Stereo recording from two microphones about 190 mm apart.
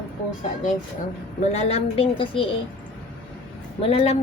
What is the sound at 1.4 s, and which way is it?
A woman's voice, 35° left (ahead or behind).